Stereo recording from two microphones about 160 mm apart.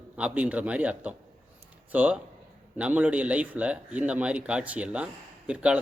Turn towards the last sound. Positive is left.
turn(degrees=-5)  # may be behind; listen again after turning